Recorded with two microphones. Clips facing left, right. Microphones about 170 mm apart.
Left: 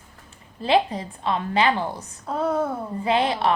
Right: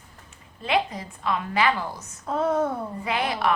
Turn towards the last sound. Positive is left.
turn(degrees=25)  # may be behind; listen again after turning